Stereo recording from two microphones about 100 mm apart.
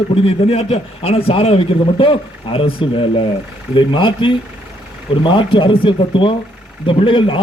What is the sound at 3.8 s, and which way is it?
A man's voice, 55° left (ahead or behind).